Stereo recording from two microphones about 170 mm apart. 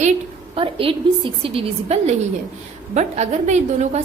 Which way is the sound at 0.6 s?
30° right (ahead or behind).